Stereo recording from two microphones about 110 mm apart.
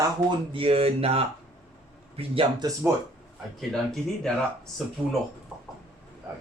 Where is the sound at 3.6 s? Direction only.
5° left (ahead or behind).